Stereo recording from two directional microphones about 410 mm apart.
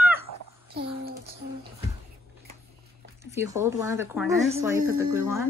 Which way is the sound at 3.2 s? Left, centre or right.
Centre.